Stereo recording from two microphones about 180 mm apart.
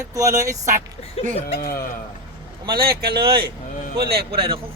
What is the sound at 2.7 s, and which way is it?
Speech, 55° right (ahead or behind).